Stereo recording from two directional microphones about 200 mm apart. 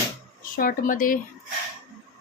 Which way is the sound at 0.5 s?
45° left (ahead or behind).